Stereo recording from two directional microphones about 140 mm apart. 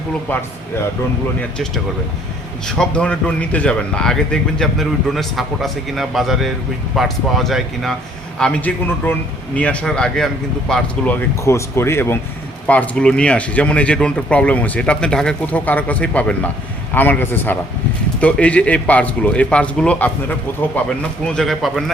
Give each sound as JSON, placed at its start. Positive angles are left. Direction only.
{"t": 1.4, "sound": "speech", "side_deg": 5}
{"t": 11.4, "sound": "speech", "side_deg": 20}